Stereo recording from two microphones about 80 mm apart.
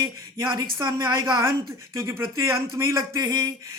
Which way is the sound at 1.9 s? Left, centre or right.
Right.